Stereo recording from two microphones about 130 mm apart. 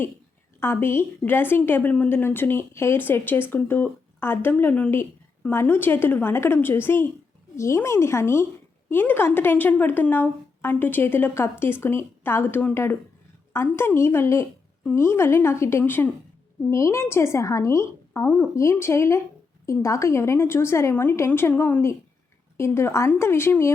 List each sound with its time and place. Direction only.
0.6 s a woman's voice: 20° left (ahead or behind)